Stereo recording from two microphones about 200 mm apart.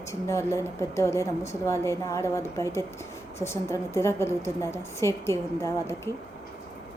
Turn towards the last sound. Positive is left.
turn(degrees=15)  # may be behind; listen again after turning